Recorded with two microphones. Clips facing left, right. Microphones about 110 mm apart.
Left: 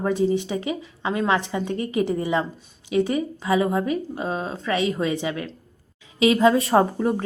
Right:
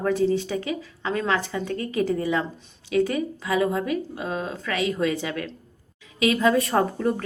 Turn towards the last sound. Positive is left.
turn(degrees=25)  # may be behind; listen again after turning